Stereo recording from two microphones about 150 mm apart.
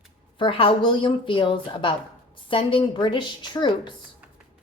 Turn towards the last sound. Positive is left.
turn(degrees=30)  # may be behind; listen again after turning